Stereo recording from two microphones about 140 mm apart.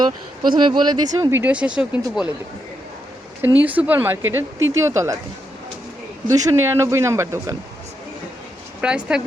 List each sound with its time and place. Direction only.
0.0 s speech: 35° right (ahead or behind); by 2.0 s 5° right (ahead or behind)
3.4 s speech: 10° right (ahead or behind)
6.2 s speech: 25° right (ahead or behind)
8.8 s speech: 5° right (ahead or behind)